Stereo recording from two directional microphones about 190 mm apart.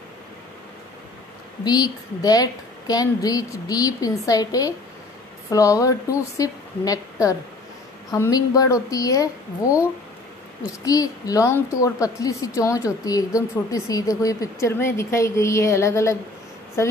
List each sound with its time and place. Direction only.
1.6 s a woman's voice: 20° left (ahead or behind)